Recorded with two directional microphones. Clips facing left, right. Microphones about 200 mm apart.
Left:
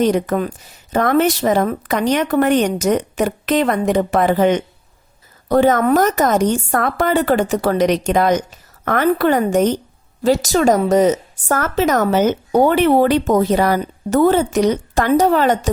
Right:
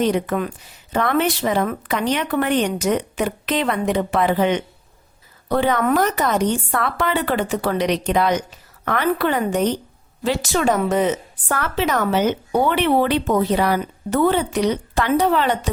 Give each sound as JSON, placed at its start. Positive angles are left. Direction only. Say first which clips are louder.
{"t": 0.0, "sound": "a woman's voice", "louder": "left 3 dB", "side_deg": 40}